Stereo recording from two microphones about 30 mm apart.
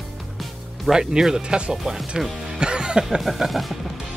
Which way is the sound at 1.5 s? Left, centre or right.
Right.